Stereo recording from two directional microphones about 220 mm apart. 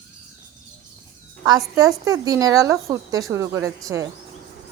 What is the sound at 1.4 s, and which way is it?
Speech, 15° right (ahead or behind).